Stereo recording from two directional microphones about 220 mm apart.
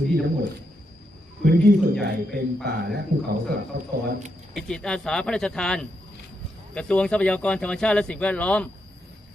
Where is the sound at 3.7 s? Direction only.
50° right (ahead or behind).